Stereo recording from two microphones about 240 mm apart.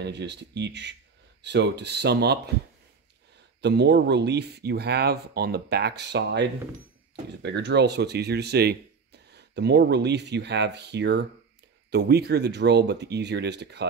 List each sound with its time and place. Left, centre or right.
0.0 s speech: right
3.6 s speech: right